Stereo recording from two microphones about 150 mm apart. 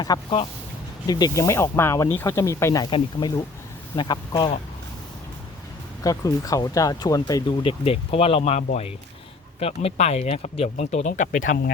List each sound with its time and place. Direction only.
0.1 s speech: 25° left (ahead or behind)
2.8 s speech: 30° left (ahead or behind)
6.0 s speech: 25° left (ahead or behind)
7.6 s speech: 35° left (ahead or behind); by 11.7 s 70° left (ahead or behind)